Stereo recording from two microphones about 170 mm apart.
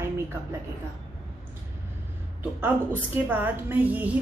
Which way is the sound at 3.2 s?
10° right (ahead or behind).